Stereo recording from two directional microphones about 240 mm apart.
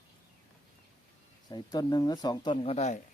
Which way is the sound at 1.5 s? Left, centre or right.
Centre.